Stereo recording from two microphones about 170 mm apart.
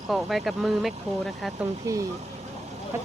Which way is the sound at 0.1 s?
Centre (ahead or behind).